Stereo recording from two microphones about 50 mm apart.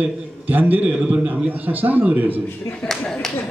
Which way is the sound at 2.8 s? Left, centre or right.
Centre.